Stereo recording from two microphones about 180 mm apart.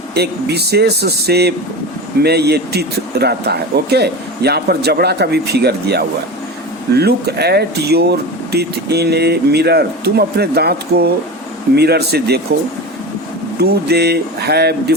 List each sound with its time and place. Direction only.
0.1 s speech: 65° right (ahead or behind)
13.6 s speech: 65° right (ahead or behind)